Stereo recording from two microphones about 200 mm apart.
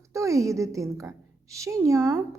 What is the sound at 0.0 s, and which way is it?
A woman's voice, 15° right (ahead or behind).